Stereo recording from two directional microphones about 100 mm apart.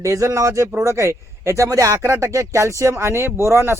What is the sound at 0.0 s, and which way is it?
Speech, 30° right (ahead or behind).